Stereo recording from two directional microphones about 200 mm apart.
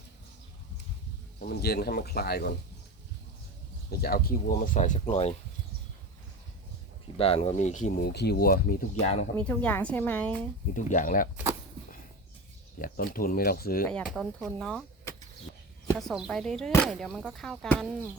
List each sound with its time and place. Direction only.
1.5 s speech: 50° left (ahead or behind)
4.0 s speech: 50° left (ahead or behind); by 5.3 s 30° left (ahead or behind)
7.2 s speech: 30° left (ahead or behind)
8.1 s speech: 55° left (ahead or behind)
9.0 s speech: 35° left (ahead or behind)
9.4 s a woman's voice: 5° left (ahead or behind)
10.8 s speech: 40° left (ahead or behind)
12.8 s speech: 45° left (ahead or behind)
13.8 s speech: 5° left (ahead or behind)
16.0 s speech: centre (ahead or behind)